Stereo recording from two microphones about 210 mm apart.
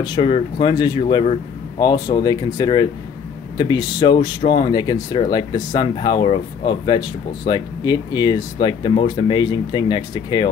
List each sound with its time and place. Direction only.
0.0 s speech: 25° left (ahead or behind)